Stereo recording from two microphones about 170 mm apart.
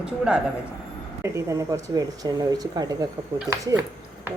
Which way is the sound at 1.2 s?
20° right (ahead or behind).